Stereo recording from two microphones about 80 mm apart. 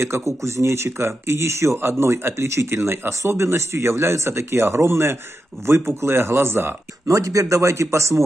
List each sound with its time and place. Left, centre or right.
0.4 s speech: right
7.1 s speech: right